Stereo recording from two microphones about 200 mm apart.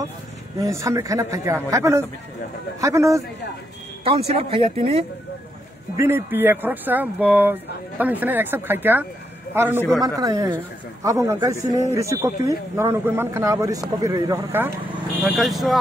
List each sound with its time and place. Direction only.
0.6 s a man's voice: 15° right (ahead or behind)
4.0 s speech: 30° right (ahead or behind)
5.9 s a man's voice: 10° right (ahead or behind)
15.2 s speech: centre (ahead or behind)